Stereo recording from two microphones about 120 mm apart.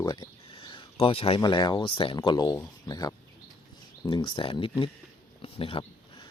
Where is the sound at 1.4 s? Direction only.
35° left (ahead or behind).